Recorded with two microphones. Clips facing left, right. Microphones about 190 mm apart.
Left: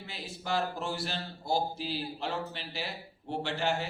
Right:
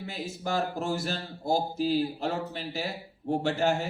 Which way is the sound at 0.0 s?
45° right (ahead or behind).